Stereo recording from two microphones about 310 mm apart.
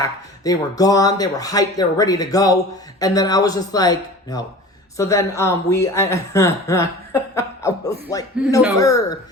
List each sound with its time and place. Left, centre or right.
0.0 s speech: centre